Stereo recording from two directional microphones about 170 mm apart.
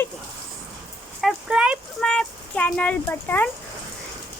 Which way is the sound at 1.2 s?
5° right (ahead or behind).